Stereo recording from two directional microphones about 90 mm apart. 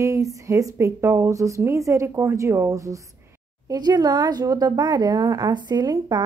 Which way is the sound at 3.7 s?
45° right (ahead or behind).